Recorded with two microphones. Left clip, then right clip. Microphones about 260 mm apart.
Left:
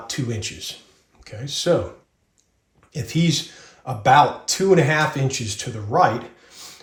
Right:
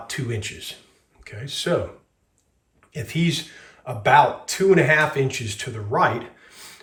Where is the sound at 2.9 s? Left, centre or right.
Centre.